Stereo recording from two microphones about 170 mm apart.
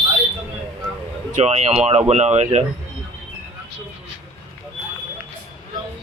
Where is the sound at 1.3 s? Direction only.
40° right (ahead or behind).